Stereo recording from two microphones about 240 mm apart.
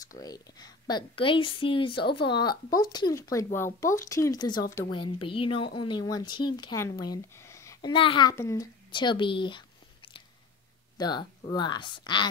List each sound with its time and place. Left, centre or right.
0.2 s speech: centre
11.0 s speech: centre